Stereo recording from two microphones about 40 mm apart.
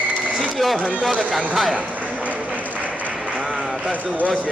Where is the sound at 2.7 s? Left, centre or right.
Right.